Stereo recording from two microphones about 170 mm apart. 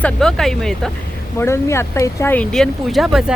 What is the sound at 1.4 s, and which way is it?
Speech, 15° left (ahead or behind).